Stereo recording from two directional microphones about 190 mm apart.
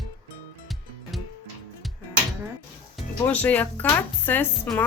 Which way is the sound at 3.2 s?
10° left (ahead or behind).